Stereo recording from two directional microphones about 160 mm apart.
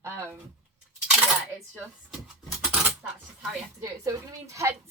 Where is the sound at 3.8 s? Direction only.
20° right (ahead or behind).